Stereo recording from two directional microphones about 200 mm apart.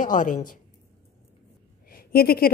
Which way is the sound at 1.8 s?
50° left (ahead or behind).